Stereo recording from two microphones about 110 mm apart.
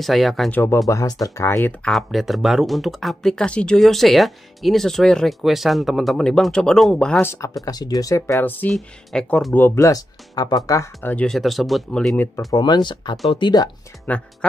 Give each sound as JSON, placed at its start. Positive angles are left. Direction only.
{"t": 0.0, "sound": "speech", "side_deg": 0}
{"t": 0.5, "sound": "speech", "side_deg": 20}
{"t": 0.8, "sound": "speech", "side_deg": 30}
{"t": 1.9, "sound": "speech", "side_deg": 0}
{"t": 7.2, "sound": "speech", "side_deg": 25}
{"t": 7.6, "sound": "speech", "side_deg": 35}
{"t": 8.4, "sound": "speech", "side_deg": 15}
{"t": 8.6, "sound": "speech", "side_deg": 5}
{"t": 9.8, "sound": "speech", "side_deg": 30}
{"t": 11.1, "sound": "speech", "side_deg": 5}
{"t": 12.5, "sound": "speech", "side_deg": 40}
{"t": 14.1, "sound": "speech", "side_deg": 15}